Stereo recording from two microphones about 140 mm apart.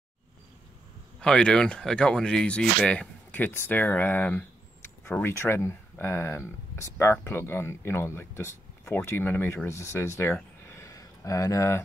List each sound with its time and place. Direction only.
1.2 s speech: 5° left (ahead or behind); by 11.8 s 20° left (ahead or behind)